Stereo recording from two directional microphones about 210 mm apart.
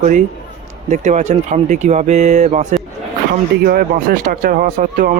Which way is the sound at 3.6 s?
45° right (ahead or behind).